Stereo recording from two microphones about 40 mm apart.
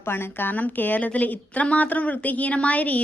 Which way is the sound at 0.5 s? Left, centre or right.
Left.